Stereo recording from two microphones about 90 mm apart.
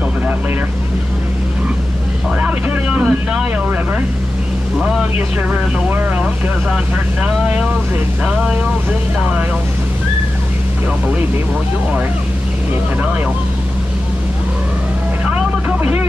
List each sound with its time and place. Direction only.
2.4 s vehicle: 20° right (ahead or behind)
5.5 s speech: 20° right (ahead or behind)
15.8 s music: 20° right (ahead or behind)